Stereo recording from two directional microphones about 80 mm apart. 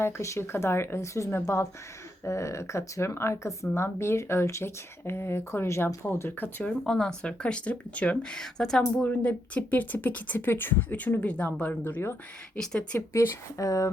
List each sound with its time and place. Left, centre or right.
0.0 s speech: left
6.7 s speech: centre
9.0 s speech: centre
12.5 s speech: centre
13.1 s speech: left